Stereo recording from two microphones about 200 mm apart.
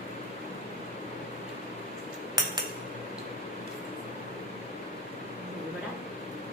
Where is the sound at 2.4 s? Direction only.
20° right (ahead or behind).